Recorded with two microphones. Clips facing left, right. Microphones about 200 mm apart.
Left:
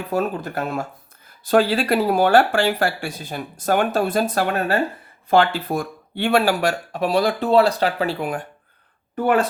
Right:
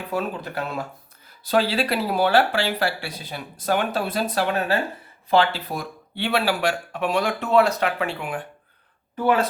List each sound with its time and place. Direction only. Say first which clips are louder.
0.1 s speech: left 4 dB; 45° left (ahead or behind)
9.1 s speech: left 2 dB; 50° left (ahead or behind)